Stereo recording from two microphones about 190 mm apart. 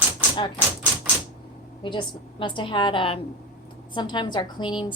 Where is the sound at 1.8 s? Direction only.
25° left (ahead or behind).